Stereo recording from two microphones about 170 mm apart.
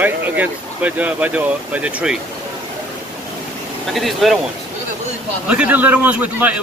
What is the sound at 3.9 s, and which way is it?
Speech, centre (ahead or behind).